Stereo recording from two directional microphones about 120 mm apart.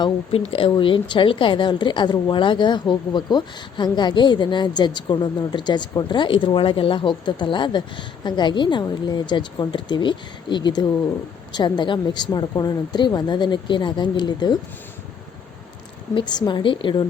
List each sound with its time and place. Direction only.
0.3 s a woman's voice: 50° left (ahead or behind)
16.1 s a woman's voice: 40° left (ahead or behind)